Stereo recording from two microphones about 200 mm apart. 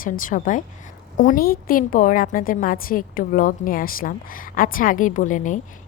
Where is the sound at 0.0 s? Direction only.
40° left (ahead or behind).